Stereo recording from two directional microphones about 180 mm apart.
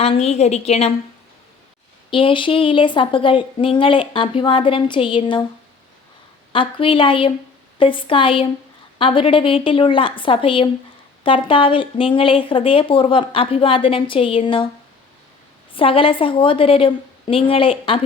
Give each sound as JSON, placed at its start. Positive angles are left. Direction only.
{"t": 0.0, "sound": "a woman's voice", "side_deg": 35}
{"t": 2.0, "sound": "speech", "side_deg": 30}
{"t": 6.5, "sound": "speech", "side_deg": 30}
{"t": 15.7, "sound": "speech", "side_deg": 30}